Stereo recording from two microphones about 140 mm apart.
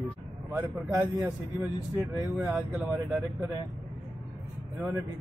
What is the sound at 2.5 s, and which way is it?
Speech, 10° right (ahead or behind).